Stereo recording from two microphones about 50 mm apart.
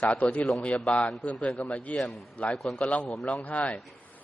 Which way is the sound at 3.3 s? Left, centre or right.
Left.